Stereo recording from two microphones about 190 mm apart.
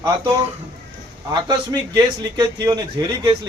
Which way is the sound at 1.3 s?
20° right (ahead or behind).